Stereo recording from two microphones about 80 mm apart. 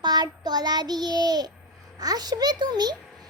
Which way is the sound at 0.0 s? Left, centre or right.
Right.